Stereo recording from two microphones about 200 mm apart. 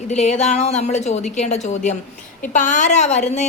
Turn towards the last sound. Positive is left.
turn(degrees=35)  # may be behind; listen again after turning